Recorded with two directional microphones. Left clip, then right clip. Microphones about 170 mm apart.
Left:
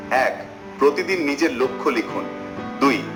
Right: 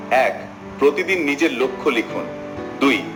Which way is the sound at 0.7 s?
30° left (ahead or behind).